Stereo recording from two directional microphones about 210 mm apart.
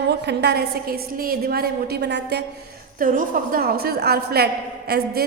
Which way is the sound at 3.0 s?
40° right (ahead or behind).